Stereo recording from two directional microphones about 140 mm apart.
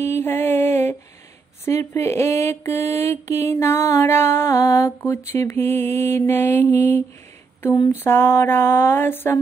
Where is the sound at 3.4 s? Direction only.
20° left (ahead or behind).